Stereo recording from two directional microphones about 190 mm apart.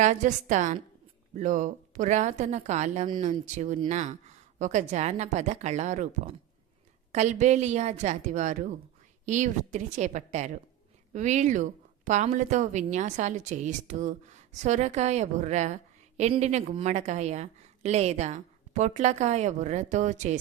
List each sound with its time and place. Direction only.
0.0 s a woman's voice: 40° right (ahead or behind)